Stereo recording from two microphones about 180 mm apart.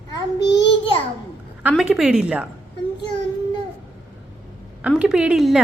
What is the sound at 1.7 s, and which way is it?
Speech, centre (ahead or behind).